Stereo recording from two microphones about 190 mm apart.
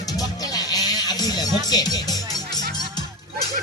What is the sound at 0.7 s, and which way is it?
Music, 20° left (ahead or behind).